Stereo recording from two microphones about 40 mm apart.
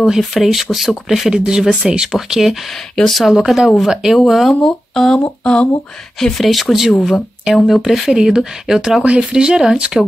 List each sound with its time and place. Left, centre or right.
0.2 s speech: centre
1.3 s speech: centre
2.1 s speech: centre
3.0 s speech: centre
3.3 s speech: centre
4.6 s speech: centre
5.4 s speech: left
6.1 s speech: centre
8.1 s speech: centre
8.6 s speech: centre
9.0 s speech: right
9.4 s speech: centre